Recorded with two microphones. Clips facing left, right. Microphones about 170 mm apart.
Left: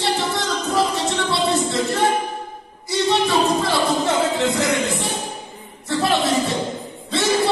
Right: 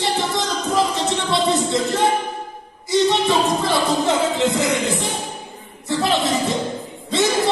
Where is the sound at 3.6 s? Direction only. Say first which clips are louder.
Right 1 dB; 20° right (ahead or behind).